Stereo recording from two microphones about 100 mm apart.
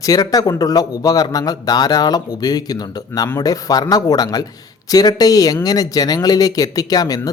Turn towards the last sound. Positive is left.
turn(degrees=40)  # may be behind; listen again after turning